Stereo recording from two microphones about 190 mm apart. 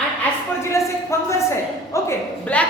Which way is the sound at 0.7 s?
15° left (ahead or behind).